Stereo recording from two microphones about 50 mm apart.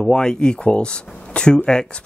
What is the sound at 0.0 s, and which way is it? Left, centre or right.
Speech, centre.